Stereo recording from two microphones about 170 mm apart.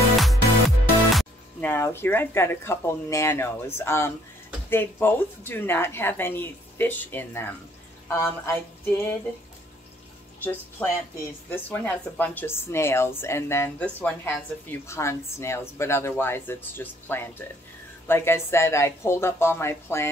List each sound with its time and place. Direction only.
0.2 s music: centre (ahead or behind)
1.7 s a woman's voice: 15° left (ahead or behind)
10.4 s a woman's voice: 10° left (ahead or behind)